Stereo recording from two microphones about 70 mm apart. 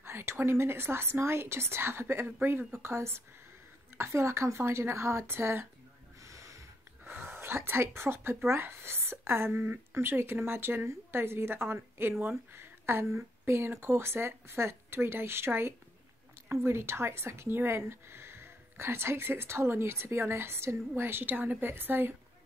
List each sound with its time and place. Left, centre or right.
0.0 s speech: right
6.2 s snort: right
7.1 s a woman's voice: right